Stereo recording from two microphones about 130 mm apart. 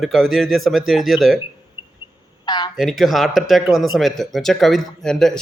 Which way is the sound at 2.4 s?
35° left (ahead or behind).